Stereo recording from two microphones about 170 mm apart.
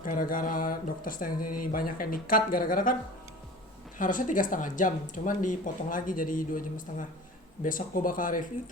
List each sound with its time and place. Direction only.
0.0 s speech: 55° left (ahead or behind)
3.9 s speech: 50° left (ahead or behind)